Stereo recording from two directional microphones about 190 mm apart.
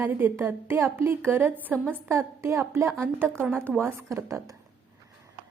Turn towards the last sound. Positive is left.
turn(degrees=-15)  # may be behind; listen again after turning